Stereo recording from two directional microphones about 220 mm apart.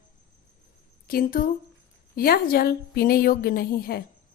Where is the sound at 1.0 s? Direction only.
40° left (ahead or behind).